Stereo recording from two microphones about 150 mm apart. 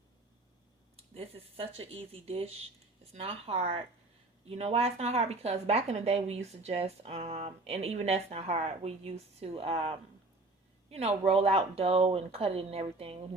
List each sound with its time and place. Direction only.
0.9 s a woman's voice: 40° right (ahead or behind)